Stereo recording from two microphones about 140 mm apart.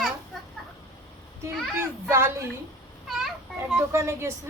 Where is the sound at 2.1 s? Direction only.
20° right (ahead or behind).